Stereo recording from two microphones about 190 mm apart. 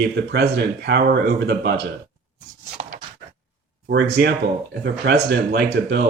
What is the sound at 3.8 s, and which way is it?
Speech, 60° right (ahead or behind).